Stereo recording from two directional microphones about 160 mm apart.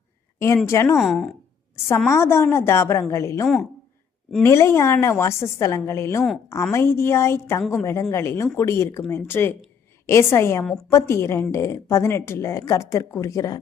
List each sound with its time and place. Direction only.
0.3 s speech: 15° left (ahead or behind)
0.9 s speech: centre (ahead or behind)
2.0 s speech: 15° left (ahead or behind)
3.4 s speech: centre (ahead or behind)
4.4 s speech: 15° left (ahead or behind)